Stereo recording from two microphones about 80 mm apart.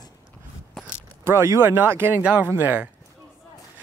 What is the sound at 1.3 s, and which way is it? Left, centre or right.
Speech, right.